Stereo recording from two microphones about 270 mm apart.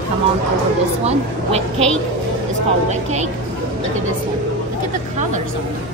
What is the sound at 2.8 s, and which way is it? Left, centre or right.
Speech, right.